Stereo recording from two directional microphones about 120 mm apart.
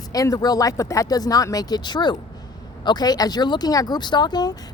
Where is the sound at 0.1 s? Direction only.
30° left (ahead or behind).